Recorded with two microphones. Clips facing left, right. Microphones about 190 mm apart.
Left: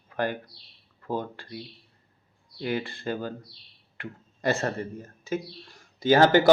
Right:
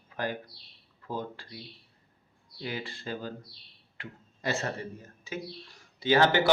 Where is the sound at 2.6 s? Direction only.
55° left (ahead or behind).